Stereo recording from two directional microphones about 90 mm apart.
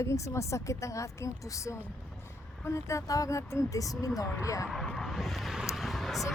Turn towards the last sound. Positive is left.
turn(degrees=0)  # may be behind; listen again after turning